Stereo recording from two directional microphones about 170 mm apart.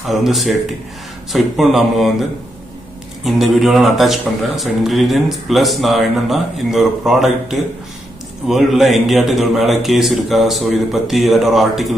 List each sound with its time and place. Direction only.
0.0 s speech: centre (ahead or behind)
3.3 s speech: centre (ahead or behind)